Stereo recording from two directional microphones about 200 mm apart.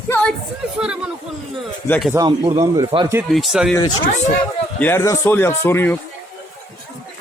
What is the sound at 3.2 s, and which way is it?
Speech, centre (ahead or behind).